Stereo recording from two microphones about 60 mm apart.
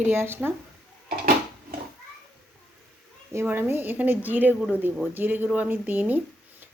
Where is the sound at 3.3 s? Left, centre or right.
Right.